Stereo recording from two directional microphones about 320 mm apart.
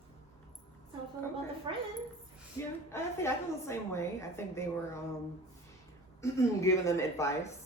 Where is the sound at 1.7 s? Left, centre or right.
Centre.